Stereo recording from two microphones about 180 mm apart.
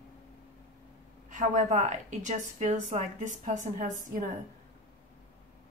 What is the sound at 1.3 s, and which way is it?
A woman's voice, 40° right (ahead or behind).